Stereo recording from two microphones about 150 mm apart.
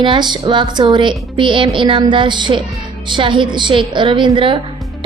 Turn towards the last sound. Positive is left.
turn(degrees=-35)  # may be behind; listen again after turning